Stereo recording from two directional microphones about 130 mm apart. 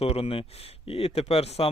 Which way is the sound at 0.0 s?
50° left (ahead or behind).